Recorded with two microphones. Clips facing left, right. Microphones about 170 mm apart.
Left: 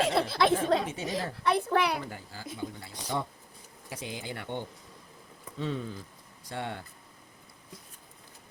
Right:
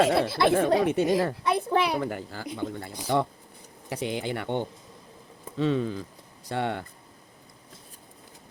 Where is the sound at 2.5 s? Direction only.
75° right (ahead or behind).